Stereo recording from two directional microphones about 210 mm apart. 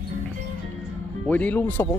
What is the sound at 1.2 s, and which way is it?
Speech, 5° left (ahead or behind).